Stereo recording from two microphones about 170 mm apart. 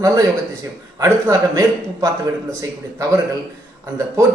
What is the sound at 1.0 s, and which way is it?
A man's voice, 15° right (ahead or behind).